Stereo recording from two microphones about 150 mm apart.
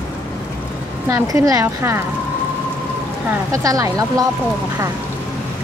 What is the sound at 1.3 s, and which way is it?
Speech, 20° right (ahead or behind).